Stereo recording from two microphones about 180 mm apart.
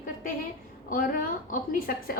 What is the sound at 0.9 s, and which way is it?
A woman's voice, 50° left (ahead or behind).